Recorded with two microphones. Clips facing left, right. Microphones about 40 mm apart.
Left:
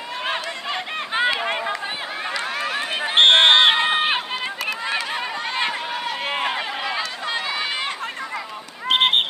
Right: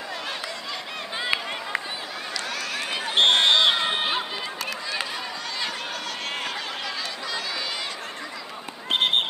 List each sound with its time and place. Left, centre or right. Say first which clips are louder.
1.1 s run: left 7 dB; left
2.3 s run: left 5 dB; left
6.0 s run: left 9 dB; left
8.8 s a sound: left 5 dB; left